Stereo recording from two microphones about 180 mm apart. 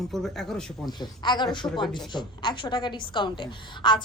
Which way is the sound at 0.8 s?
25° left (ahead or behind).